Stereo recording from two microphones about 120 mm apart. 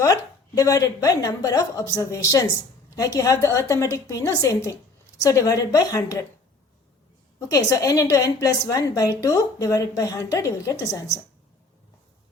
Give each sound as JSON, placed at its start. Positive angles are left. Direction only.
{"t": 0.0, "sound": "a woman's voice", "side_deg": 30}
{"t": 7.3, "sound": "a woman's voice", "side_deg": 25}